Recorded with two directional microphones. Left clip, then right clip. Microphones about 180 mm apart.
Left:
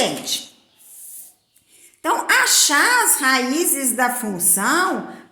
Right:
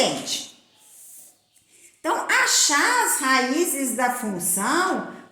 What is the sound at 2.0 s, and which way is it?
A woman's voice, 30° left (ahead or behind).